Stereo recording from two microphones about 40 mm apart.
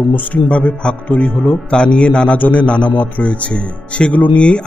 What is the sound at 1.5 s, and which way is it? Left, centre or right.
Speech, left.